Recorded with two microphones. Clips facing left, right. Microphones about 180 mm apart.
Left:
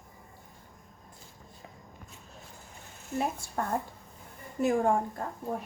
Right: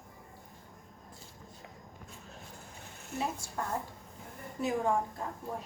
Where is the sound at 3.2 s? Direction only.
55° left (ahead or behind).